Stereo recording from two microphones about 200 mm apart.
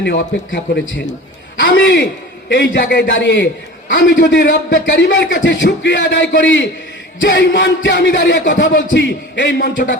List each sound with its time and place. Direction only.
0.0 s speech: 60° left (ahead or behind)
1.7 s speech: 55° left (ahead or behind)
8.5 s speech: 50° left (ahead or behind)